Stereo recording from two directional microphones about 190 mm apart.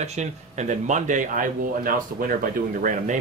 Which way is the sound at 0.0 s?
35° right (ahead or behind).